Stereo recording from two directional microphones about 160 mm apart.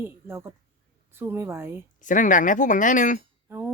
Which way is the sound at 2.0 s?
55° left (ahead or behind).